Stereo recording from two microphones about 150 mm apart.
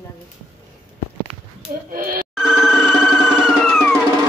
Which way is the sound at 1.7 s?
70° right (ahead or behind).